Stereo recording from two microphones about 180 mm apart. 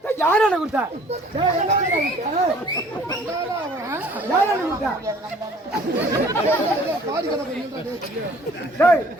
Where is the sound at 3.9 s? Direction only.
10° right (ahead or behind).